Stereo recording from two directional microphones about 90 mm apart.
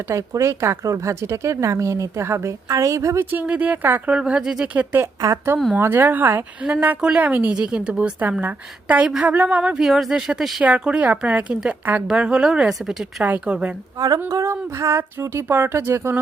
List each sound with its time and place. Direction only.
0.1 s speech: 35° right (ahead or behind)
3.2 s speech: 20° right (ahead or behind)
4.1 s a woman's voice: 10° right (ahead or behind)
5.2 s speech: 35° right (ahead or behind)
5.7 s a woman's voice: 25° right (ahead or behind)
9.8 s a woman's voice: centre (ahead or behind)
13.2 s a woman's voice: 15° right (ahead or behind)
14.3 s speech: 35° right (ahead or behind)